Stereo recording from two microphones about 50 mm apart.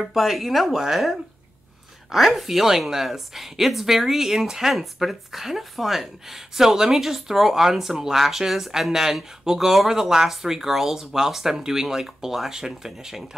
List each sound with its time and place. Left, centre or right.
0.0 s a woman's voice: centre